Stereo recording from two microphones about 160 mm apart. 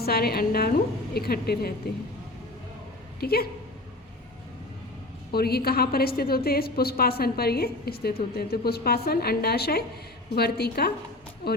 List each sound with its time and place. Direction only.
0.0 s a woman's voice: 75° left (ahead or behind)
3.2 s speech: 70° left (ahead or behind)
5.3 s a woman's voice: 75° left (ahead or behind)